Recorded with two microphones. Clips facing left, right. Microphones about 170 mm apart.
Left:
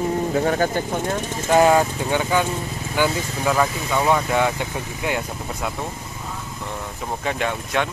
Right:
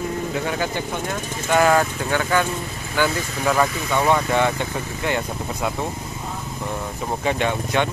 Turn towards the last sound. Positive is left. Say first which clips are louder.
# right 2 dB
turn(degrees=0)  # may be behind; listen again after turning